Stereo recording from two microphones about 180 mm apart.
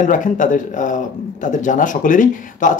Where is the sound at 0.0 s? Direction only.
45° left (ahead or behind).